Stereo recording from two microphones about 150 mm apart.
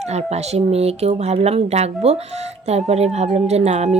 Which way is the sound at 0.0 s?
45° right (ahead or behind).